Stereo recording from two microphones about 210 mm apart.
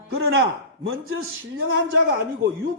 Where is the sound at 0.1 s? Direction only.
70° right (ahead or behind).